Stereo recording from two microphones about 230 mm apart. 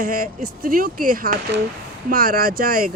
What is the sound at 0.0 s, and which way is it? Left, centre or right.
Speech, right.